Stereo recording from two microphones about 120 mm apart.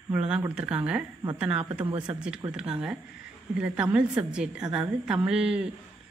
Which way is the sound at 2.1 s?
5° right (ahead or behind).